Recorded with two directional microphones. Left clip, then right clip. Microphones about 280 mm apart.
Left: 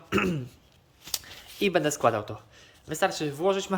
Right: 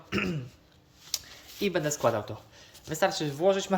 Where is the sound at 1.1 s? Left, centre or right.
Centre.